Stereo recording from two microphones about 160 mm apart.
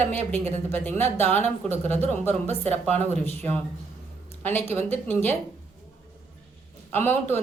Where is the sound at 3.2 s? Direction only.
15° left (ahead or behind).